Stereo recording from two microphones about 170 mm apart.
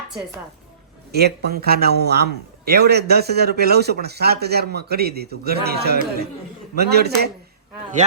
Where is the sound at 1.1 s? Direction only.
70° right (ahead or behind).